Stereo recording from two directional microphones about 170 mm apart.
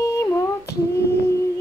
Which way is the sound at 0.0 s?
20° left (ahead or behind).